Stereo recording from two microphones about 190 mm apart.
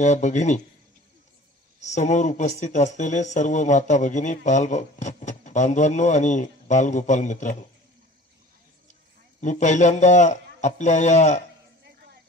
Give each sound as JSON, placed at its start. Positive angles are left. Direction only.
{"t": 0.0, "sound": "speech", "side_deg": 40}
{"t": 1.8, "sound": "speech", "side_deg": 40}
{"t": 9.4, "sound": "speech", "side_deg": 40}
{"t": 11.8, "sound": "music", "side_deg": -60}